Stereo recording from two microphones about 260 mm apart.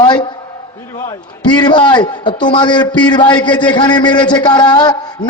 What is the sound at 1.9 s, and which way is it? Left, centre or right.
A man's voice, centre.